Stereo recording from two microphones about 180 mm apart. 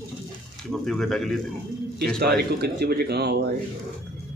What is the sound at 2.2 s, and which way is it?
Speech, 60° right (ahead or behind).